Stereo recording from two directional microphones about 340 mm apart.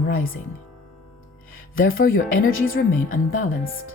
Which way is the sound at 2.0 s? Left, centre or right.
Left.